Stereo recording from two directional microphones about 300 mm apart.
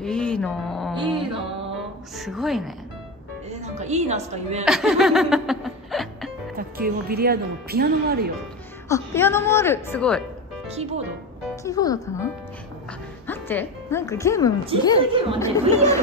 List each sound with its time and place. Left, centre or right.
0.0 s speech: centre
0.9 s music: centre
2.1 s a woman's voice: centre
3.4 s a woman's voice: right
4.6 s music: centre
6.5 s speech: right
8.8 s speech: centre
10.7 s speech: right
11.6 s speech: centre
13.3 s speech: centre
15.0 s speech: centre
15.3 s speech: centre